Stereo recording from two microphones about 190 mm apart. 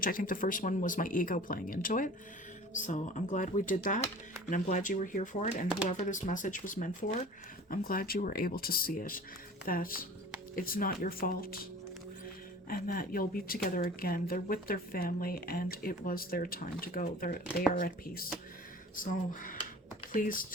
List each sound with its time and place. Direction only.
0.0 s speech: 45° left (ahead or behind)
12.6 s speech: 50° left (ahead or behind)